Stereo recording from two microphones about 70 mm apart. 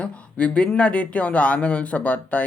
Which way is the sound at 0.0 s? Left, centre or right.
Centre.